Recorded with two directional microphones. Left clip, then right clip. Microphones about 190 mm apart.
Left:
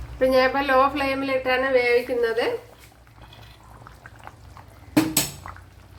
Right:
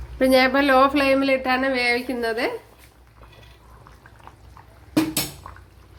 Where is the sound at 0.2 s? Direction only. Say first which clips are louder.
Right 2 dB; 50° right (ahead or behind).